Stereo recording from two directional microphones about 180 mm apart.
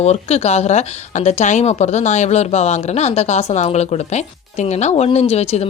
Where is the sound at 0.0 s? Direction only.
35° left (ahead or behind).